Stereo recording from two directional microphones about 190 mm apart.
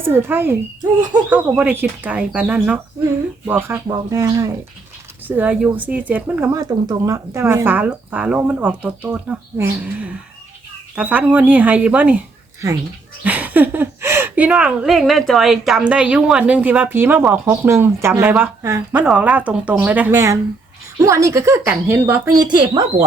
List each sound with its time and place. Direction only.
0.0 s a woman's voice: 10° right (ahead or behind)
13.2 s a woman's voice: 10° right (ahead or behind)
22.4 s speech: 25° right (ahead or behind)